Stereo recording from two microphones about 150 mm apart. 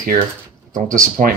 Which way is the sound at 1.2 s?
55° right (ahead or behind).